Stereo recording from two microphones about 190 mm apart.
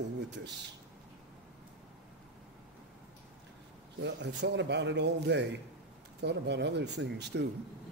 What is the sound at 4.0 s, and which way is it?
A man's voice, 65° right (ahead or behind).